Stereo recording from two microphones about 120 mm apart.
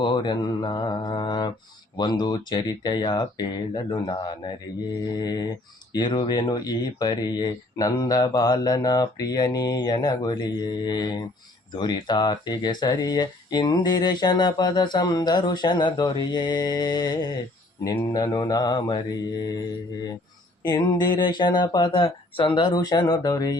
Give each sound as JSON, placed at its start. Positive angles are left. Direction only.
{"t": 0.0, "sound": "speech", "side_deg": 40}
{"t": 17.8, "sound": "speech", "side_deg": 25}
{"t": 18.1, "sound": "speech", "side_deg": 35}
{"t": 20.7, "sound": "speech", "side_deg": 35}